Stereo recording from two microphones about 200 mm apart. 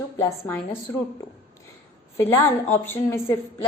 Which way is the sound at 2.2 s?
10° left (ahead or behind).